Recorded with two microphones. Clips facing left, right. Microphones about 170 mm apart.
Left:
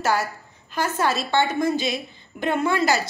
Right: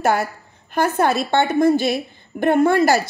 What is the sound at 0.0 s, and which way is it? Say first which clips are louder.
A woman's voice: right 4 dB; 55° right (ahead or behind).